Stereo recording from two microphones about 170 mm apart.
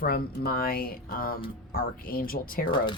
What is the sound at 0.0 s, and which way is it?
Speech, 65° left (ahead or behind).